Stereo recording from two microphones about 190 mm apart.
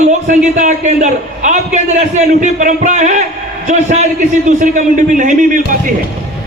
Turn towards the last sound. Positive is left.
turn(degrees=-45)  # may be behind; listen again after turning